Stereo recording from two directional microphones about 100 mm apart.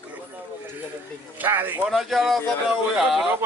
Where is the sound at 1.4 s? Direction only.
20° right (ahead or behind).